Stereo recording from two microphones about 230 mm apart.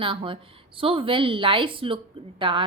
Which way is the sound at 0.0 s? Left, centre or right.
Right.